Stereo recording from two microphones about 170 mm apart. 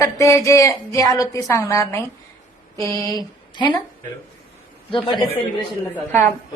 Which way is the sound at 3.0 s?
20° left (ahead or behind).